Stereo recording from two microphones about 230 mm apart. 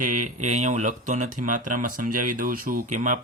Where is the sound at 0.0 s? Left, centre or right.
Right.